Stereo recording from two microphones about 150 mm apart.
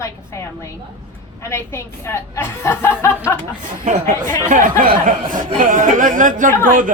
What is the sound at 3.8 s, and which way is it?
Speech, 65° right (ahead or behind).